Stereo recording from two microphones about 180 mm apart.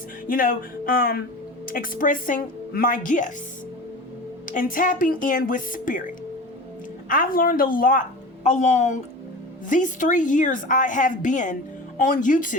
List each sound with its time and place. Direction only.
0.3 s a woman's voice: 50° left (ahead or behind)
4.4 s a woman's voice: 50° left (ahead or behind)